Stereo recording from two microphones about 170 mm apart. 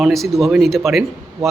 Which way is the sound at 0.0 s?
Centre (ahead or behind).